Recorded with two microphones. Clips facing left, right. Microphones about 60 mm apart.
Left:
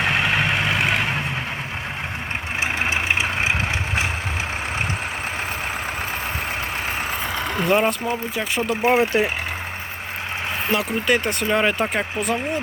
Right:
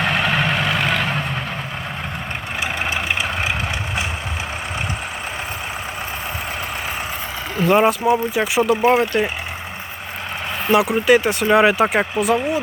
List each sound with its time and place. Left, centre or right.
0.0 s vehicle: centre
2.8 s vehicle: left
7.5 s speech: centre
8.0 s speech: centre
8.8 s speech: centre
10.7 s speech: centre